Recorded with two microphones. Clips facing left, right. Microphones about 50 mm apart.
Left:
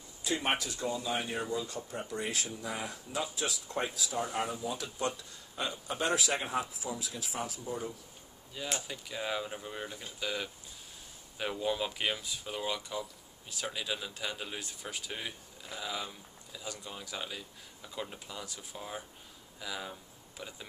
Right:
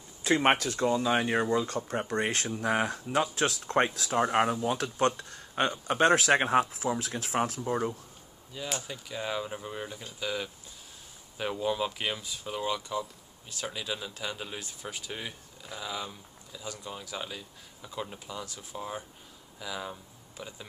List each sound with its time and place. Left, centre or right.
0.2 s speech: right
8.8 s speech: centre